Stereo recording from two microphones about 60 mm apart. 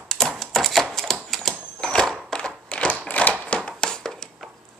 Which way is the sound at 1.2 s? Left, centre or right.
Centre.